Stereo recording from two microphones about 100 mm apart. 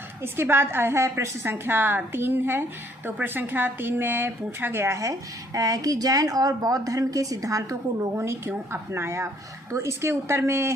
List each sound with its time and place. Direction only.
0.2 s a woman's voice: 25° right (ahead or behind)